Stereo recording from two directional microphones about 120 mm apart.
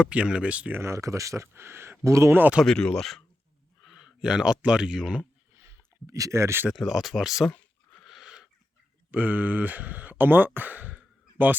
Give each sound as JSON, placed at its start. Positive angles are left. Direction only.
{"t": 0.0, "sound": "speech", "side_deg": -10}
{"t": 0.8, "sound": "speech", "side_deg": -25}
{"t": 2.6, "sound": "speech", "side_deg": 5}
{"t": 5.6, "sound": "speech", "side_deg": -30}
{"t": 6.7, "sound": "speech", "side_deg": -5}
{"t": 7.5, "sound": "a sound", "side_deg": 0}
{"t": 9.1, "sound": "speech", "side_deg": -15}